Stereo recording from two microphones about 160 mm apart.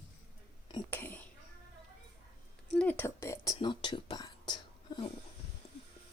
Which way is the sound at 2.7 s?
10° left (ahead or behind).